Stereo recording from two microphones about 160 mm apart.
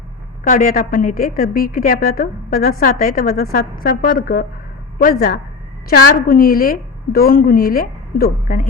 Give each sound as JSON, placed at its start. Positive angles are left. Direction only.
{"t": 0.4, "sound": "a woman's voice", "side_deg": 55}